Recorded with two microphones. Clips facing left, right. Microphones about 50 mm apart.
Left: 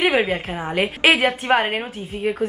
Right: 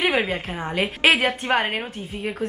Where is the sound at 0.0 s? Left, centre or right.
Centre.